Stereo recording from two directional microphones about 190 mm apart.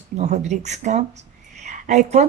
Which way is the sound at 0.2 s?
35° right (ahead or behind).